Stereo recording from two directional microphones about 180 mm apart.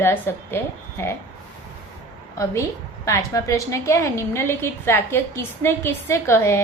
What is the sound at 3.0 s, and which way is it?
A woman's voice, 15° left (ahead or behind).